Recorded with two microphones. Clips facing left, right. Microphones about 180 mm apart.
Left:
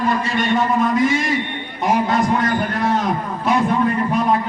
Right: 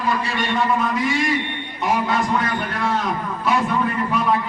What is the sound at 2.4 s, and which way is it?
Speech, 40° left (ahead or behind).